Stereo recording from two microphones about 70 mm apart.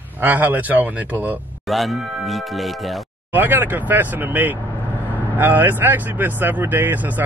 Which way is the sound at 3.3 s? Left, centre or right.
Right.